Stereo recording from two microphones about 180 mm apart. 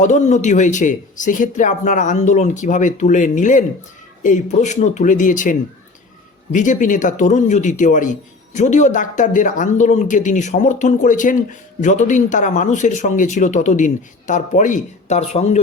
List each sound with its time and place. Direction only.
0.0 s speech: 40° left (ahead or behind)